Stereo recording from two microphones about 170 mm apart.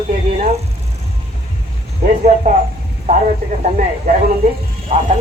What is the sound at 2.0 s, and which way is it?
Speech, 45° right (ahead or behind).